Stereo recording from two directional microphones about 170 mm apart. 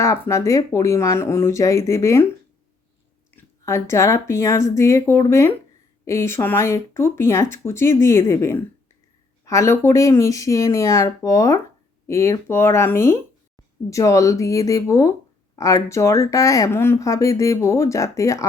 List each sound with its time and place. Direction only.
0.0 s speech: 15° left (ahead or behind)
3.3 s speech: 15° left (ahead or behind)